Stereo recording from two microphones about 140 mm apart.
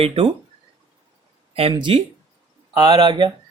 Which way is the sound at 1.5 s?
40° right (ahead or behind).